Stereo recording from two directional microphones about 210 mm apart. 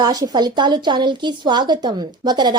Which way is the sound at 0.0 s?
20° right (ahead or behind).